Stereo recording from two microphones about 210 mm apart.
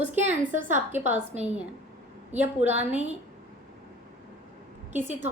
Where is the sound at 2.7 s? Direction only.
30° right (ahead or behind).